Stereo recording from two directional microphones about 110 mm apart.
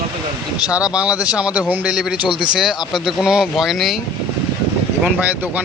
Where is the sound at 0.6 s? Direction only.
10° right (ahead or behind).